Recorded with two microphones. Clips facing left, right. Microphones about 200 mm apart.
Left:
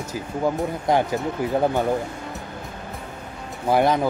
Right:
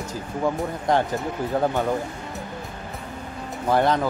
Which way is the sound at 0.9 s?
10° left (ahead or behind).